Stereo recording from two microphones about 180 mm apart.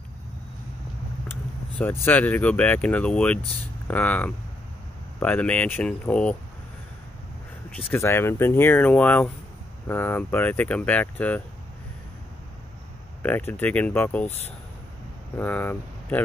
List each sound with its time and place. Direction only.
1.3 s vehicle: 10° left (ahead or behind)
2.0 s speech: 10° left (ahead or behind)
7.7 s speech: 10° left (ahead or behind)
13.2 s speech: 10° left (ahead or behind)
15.3 s speech: 10° left (ahead or behind)